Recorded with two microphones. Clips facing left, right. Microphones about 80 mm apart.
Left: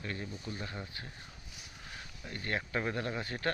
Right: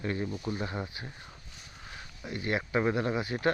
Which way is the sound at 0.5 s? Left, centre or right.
Right.